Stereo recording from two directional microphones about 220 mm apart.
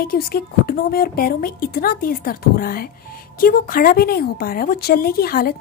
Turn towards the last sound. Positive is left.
turn(degrees=45)  # may be behind; listen again after turning